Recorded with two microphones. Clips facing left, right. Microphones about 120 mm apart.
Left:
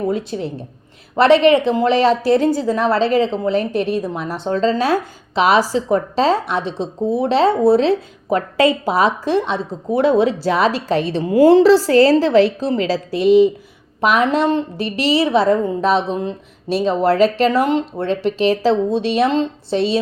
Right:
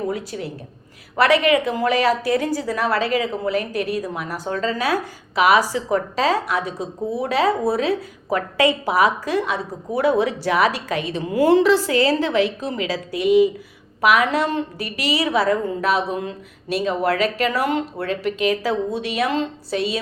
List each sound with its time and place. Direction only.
0.1 s a woman's voice: 25° left (ahead or behind)